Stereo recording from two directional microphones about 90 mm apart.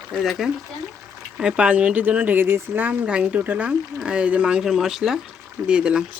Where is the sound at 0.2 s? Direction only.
5° right (ahead or behind).